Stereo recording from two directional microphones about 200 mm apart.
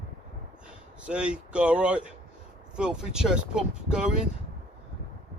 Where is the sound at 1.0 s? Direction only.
5° right (ahead or behind).